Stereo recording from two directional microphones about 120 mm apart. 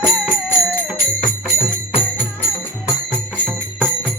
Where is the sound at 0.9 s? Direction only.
5° left (ahead or behind).